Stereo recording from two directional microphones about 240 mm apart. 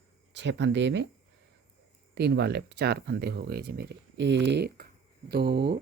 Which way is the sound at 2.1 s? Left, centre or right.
Right.